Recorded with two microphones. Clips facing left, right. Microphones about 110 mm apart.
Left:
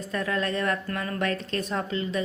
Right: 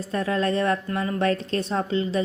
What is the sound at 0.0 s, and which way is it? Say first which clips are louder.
A woman's voice: right 4 dB; 30° right (ahead or behind).